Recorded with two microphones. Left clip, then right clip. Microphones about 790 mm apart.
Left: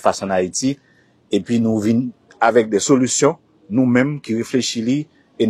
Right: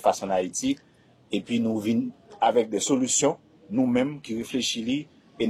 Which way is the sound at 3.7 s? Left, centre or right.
Left.